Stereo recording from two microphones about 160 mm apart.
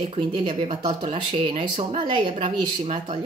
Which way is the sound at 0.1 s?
35° right (ahead or behind).